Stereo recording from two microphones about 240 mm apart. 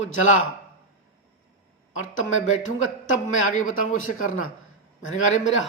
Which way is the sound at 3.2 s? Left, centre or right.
Left.